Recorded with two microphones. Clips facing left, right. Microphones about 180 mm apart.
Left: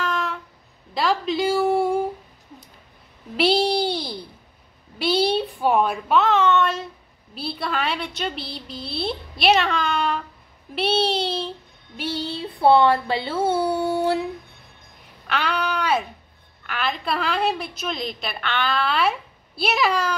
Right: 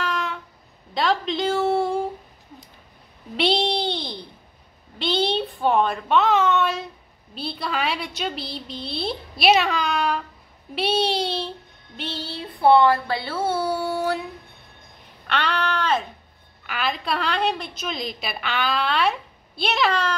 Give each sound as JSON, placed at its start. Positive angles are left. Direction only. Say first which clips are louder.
{"t": 0.0, "sound": "a sound", "louder": "left 1 dB", "side_deg": 0}
{"t": 0.9, "sound": "a woman's voice", "louder": "left 1 dB", "side_deg": 5}
{"t": 3.3, "sound": "a sound", "louder": "left 3 dB", "side_deg": 5}
{"t": 4.9, "sound": "a woman's voice", "louder": "left 2 dB", "side_deg": 10}
{"t": 12.0, "sound": "a woman's voice", "louder": "left 4 dB", "side_deg": 15}
{"t": 12.4, "sound": "speech", "louder": "even", "side_deg": 25}
{"t": 15.2, "sound": "a woman's voice", "louder": "even", "side_deg": 5}